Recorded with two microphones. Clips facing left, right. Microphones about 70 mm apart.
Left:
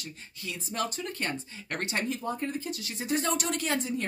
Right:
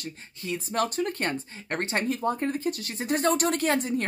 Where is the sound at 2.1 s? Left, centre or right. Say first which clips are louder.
Right 5 dB; right.